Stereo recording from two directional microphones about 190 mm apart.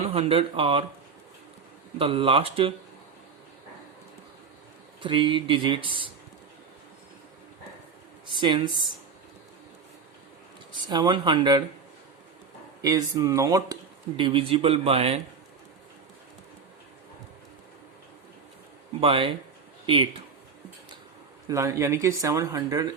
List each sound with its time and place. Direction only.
0.1 s speech: 30° right (ahead or behind)
2.0 s speech: 30° right (ahead or behind)
5.0 s speech: 25° right (ahead or behind)
8.3 s speech: 25° right (ahead or behind)
10.8 s speech: 20° right (ahead or behind)
12.8 s a man's voice: 20° right (ahead or behind)
18.9 s speech: 30° right (ahead or behind)
21.4 s speech: 15° right (ahead or behind)